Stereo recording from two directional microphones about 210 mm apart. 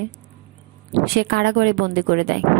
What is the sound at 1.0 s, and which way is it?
Speech, 50° right (ahead or behind).